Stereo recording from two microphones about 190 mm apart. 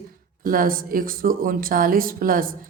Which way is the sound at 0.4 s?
45° right (ahead or behind).